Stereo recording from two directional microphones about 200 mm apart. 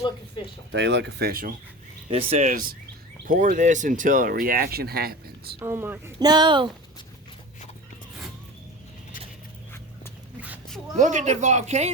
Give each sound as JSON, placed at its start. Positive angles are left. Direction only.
{"t": 0.7, "sound": "speech", "side_deg": -60}
{"t": 2.0, "sound": "speech", "side_deg": -30}
{"t": 5.5, "sound": "speech", "side_deg": -10}
{"t": 10.4, "sound": "dog", "side_deg": -5}
{"t": 10.9, "sound": "speech", "side_deg": -35}